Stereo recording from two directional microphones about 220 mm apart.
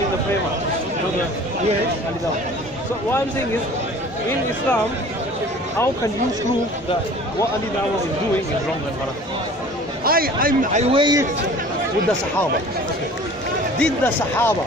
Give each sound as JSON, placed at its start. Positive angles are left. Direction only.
{"t": 10.0, "sound": "a man's voice", "side_deg": -40}
{"t": 13.7, "sound": "speech", "side_deg": 10}